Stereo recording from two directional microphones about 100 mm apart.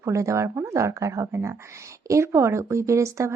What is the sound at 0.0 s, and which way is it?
Speech, 30° right (ahead or behind).